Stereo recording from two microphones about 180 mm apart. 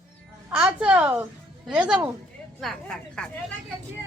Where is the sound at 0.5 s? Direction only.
5° right (ahead or behind).